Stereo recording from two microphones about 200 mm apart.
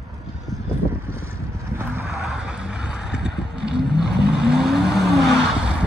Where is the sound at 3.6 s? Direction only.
55° right (ahead or behind).